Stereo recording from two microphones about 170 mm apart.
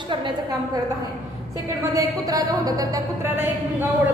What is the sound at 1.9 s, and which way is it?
A woman's voice, 20° right (ahead or behind).